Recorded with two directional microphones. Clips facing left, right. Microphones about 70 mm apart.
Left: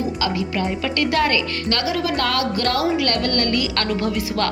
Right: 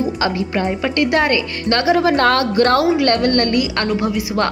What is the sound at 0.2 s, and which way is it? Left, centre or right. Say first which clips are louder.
Speech: right 3 dB; right.